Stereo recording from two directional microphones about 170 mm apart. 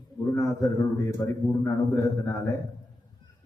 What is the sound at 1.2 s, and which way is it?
Speech, 20° left (ahead or behind).